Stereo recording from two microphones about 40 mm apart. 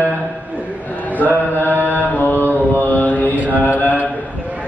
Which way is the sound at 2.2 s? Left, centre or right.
Left.